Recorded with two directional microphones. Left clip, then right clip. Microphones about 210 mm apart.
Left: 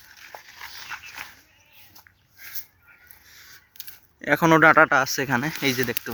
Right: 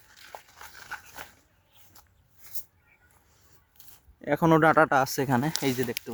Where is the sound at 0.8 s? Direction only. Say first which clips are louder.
Left 3 dB; 15° right (ahead or behind).